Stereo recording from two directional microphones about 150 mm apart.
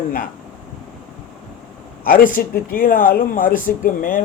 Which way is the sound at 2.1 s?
70° left (ahead or behind).